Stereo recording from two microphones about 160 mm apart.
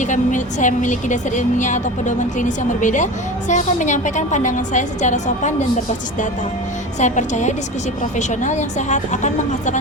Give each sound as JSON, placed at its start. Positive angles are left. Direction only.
{"t": 0.0, "sound": "a woman's voice", "side_deg": 50}
{"t": 7.0, "sound": "a woman's voice", "side_deg": 50}